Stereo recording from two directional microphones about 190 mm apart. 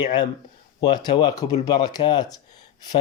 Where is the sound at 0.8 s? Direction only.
20° left (ahead or behind).